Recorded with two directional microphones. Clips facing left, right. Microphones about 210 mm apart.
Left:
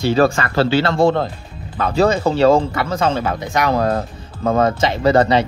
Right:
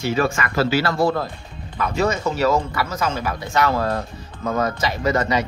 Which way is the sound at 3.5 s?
15° left (ahead or behind).